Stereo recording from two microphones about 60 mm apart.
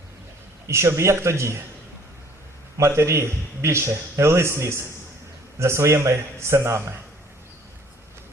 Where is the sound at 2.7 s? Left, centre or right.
Right.